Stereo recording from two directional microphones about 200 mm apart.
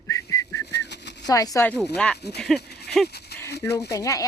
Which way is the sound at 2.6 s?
55° left (ahead or behind).